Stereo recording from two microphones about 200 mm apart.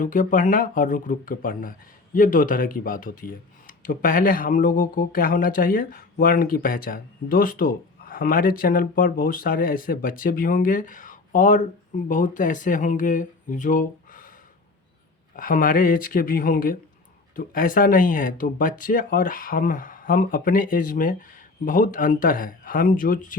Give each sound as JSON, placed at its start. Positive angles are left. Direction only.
{"t": 0.0, "sound": "speech", "side_deg": 40}
{"t": 15.4, "sound": "speech", "side_deg": 45}